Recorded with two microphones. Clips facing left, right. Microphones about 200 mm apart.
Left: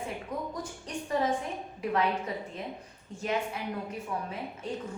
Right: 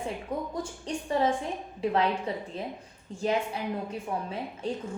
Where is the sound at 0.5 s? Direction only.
30° right (ahead or behind).